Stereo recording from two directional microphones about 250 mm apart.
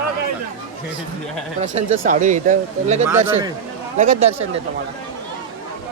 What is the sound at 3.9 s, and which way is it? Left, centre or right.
Speech, right.